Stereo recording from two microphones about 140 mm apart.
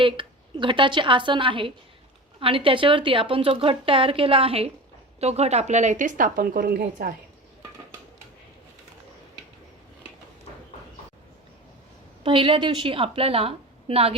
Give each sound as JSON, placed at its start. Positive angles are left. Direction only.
{"t": 0.0, "sound": "a woman's voice", "side_deg": -40}
{"t": 12.2, "sound": "a woman's voice", "side_deg": -40}